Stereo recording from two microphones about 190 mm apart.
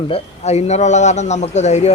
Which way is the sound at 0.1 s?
35° left (ahead or behind).